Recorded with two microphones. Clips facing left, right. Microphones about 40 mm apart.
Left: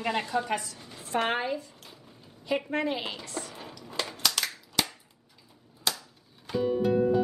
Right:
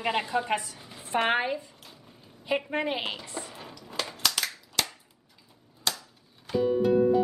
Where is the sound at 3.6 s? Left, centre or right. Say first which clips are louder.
Even; centre.